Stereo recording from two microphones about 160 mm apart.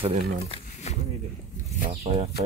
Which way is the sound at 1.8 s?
35° right (ahead or behind).